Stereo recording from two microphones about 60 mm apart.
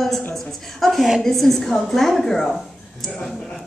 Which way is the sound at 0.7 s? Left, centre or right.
Centre.